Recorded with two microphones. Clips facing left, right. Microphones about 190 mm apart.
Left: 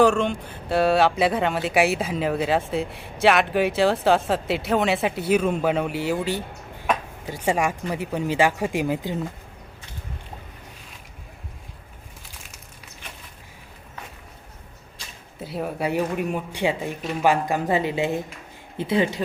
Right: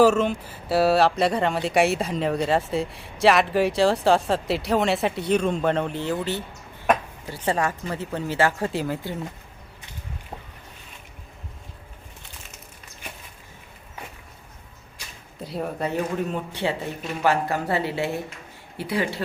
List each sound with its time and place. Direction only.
0.0 s speech: 5° right (ahead or behind); by 9.1 s 15° left (ahead or behind)
15.4 s speech: centre (ahead or behind); by 19.2 s 20° left (ahead or behind)